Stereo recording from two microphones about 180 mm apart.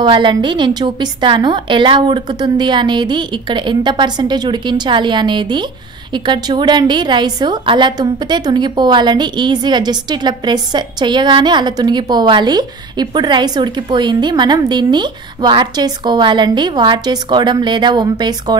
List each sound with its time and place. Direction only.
0.0 s a woman's voice: 25° right (ahead or behind)